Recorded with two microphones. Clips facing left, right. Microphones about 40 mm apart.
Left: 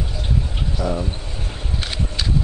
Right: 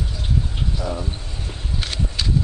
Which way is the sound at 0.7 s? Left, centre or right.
Centre.